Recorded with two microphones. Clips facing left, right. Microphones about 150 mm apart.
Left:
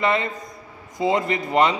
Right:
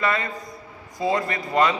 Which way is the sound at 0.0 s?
20° left (ahead or behind).